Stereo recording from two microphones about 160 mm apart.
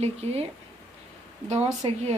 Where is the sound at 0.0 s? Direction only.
40° right (ahead or behind).